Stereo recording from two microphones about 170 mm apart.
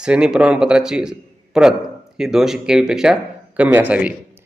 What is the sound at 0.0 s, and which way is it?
A man's voice, 5° right (ahead or behind).